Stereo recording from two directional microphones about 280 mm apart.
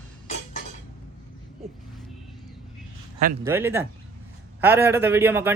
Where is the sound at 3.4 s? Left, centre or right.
Centre.